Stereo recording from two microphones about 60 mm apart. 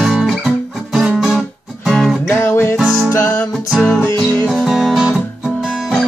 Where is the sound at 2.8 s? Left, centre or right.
Right.